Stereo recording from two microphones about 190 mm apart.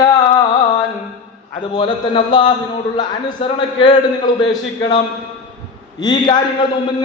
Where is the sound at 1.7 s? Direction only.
25° left (ahead or behind).